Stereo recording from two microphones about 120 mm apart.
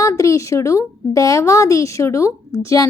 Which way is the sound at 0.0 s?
25° left (ahead or behind).